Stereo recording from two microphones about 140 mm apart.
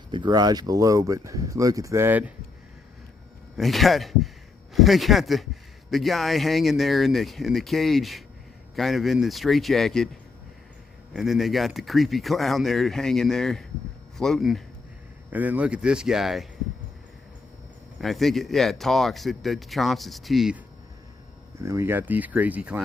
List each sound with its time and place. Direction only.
0.1 s speech: 30° right (ahead or behind); by 2.3 s 15° right (ahead or behind)
3.6 s speech: centre (ahead or behind)
11.1 s speech: centre (ahead or behind)
15.3 s speech: 10° right (ahead or behind)
18.0 s speech: centre (ahead or behind)
21.6 s speech: 20° right (ahead or behind)